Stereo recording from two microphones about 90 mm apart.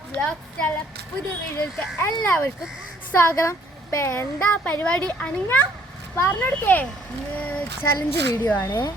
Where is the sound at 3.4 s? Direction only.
30° left (ahead or behind).